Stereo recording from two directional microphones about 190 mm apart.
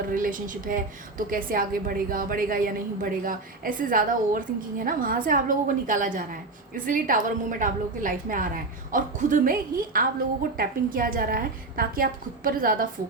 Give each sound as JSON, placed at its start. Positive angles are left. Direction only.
{"t": 0.1, "sound": "a woman's voice", "side_deg": -45}